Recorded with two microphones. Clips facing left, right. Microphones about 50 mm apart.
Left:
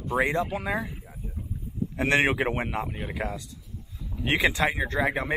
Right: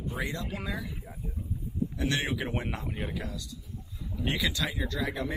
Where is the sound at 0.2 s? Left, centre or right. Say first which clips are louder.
Left 11 dB; left.